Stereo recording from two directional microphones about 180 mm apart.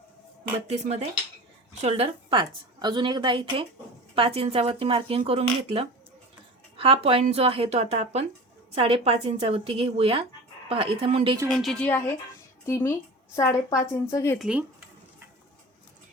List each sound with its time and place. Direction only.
0.7 s a woman's voice: 35° right (ahead or behind)
11.4 s a woman's voice: centre (ahead or behind); by 14.3 s 15° left (ahead or behind)
14.3 s speech: 5° right (ahead or behind)